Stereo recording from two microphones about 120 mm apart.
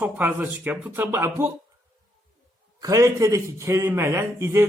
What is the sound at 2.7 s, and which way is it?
A woman's voice, 30° right (ahead or behind).